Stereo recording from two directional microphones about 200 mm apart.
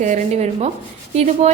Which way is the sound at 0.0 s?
35° right (ahead or behind).